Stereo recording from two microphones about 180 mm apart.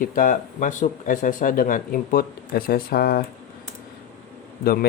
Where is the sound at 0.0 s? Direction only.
50° left (ahead or behind).